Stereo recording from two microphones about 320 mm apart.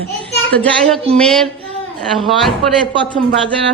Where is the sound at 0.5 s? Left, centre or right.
Centre.